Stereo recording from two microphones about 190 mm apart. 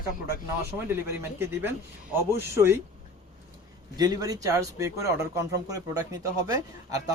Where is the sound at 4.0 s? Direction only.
20° right (ahead or behind).